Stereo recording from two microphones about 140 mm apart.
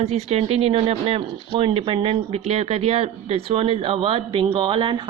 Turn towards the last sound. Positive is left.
turn(degrees=-35)  # may be behind; listen again after turning